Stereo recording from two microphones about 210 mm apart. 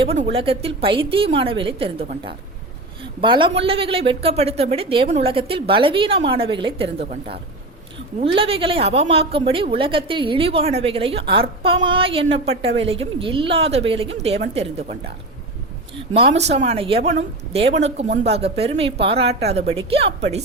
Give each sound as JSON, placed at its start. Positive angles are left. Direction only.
{"t": 0.0, "sound": "a woman's voice", "side_deg": -30}
{"t": 8.2, "sound": "a woman's voice", "side_deg": -25}
{"t": 16.3, "sound": "a woman's voice", "side_deg": -30}